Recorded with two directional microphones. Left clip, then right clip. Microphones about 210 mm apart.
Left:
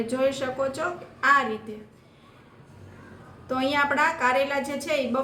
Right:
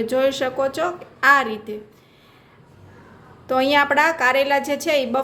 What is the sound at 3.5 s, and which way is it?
A woman's voice, 45° right (ahead or behind).